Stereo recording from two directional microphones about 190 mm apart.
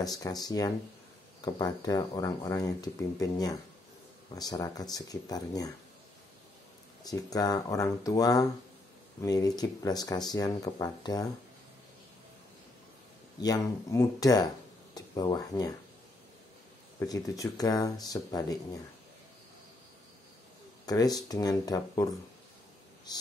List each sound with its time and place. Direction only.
0.0 s speech: 20° left (ahead or behind)
7.0 s speech: 20° left (ahead or behind)
13.4 s speech: 20° left (ahead or behind)
17.1 s speech: 20° left (ahead or behind)
20.8 s speech: 20° left (ahead or behind)
23.1 s speech: 20° left (ahead or behind)